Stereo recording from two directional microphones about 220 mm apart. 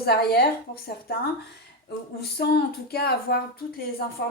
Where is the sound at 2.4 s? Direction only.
45° left (ahead or behind).